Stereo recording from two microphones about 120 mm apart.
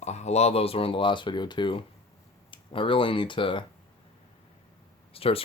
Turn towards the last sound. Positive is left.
turn(degrees=50)  # may be behind; listen again after turning